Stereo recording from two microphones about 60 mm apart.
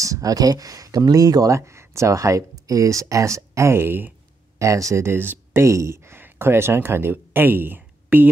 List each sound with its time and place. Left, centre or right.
0.0 s speech: right
4.6 s speech: right
5.0 s speech: right
5.6 s speech: right
6.1 s speech: right